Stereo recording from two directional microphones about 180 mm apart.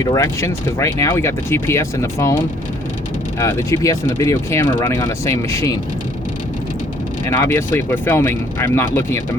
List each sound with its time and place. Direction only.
0.0 s speech: 20° left (ahead or behind)
3.3 s speech: 15° left (ahead or behind)
7.3 s speech: 15° left (ahead or behind)